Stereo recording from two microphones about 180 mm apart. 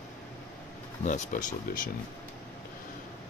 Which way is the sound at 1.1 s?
50° left (ahead or behind).